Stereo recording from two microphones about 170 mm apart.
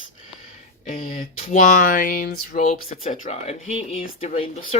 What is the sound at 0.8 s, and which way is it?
Speech, 45° left (ahead or behind).